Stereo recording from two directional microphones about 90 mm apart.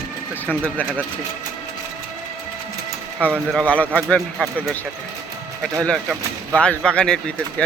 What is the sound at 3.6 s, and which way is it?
Speech, 15° left (ahead or behind).